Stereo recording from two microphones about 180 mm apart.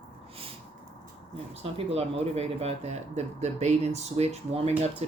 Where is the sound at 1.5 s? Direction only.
35° right (ahead or behind).